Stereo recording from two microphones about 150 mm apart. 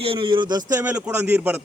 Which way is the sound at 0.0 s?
35° right (ahead or behind).